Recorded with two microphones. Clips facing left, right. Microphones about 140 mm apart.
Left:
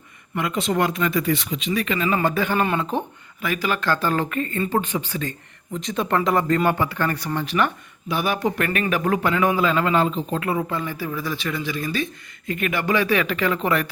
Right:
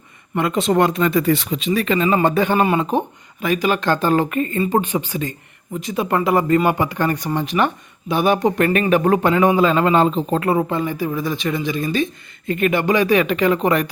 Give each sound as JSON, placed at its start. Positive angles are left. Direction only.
{"t": 0.9, "sound": "a man's voice", "side_deg": -25}
{"t": 2.1, "sound": "a man's voice", "side_deg": -25}